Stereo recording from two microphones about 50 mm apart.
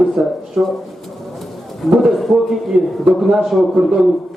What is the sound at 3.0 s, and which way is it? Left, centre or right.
Speech, centre.